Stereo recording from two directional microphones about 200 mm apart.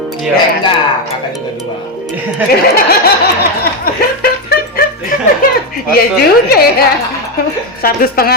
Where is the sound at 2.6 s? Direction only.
50° left (ahead or behind).